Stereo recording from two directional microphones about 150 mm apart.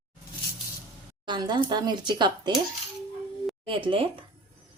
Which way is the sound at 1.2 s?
30° right (ahead or behind).